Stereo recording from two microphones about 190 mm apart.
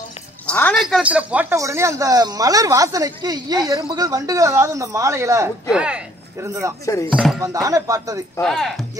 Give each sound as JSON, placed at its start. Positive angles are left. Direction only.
{"t": 0.5, "sound": "a woman's voice", "side_deg": 5}
{"t": 6.9, "sound": "speech", "side_deg": 15}
{"t": 7.3, "sound": "a woman's voice", "side_deg": -15}
{"t": 8.4, "sound": "speech", "side_deg": 0}